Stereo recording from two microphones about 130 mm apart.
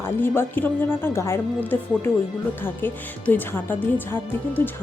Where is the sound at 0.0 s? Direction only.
15° left (ahead or behind).